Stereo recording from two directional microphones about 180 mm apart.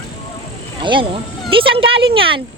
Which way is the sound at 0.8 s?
25° right (ahead or behind).